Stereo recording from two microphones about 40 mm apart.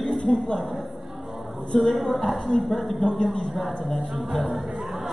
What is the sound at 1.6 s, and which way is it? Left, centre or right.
Speech, centre.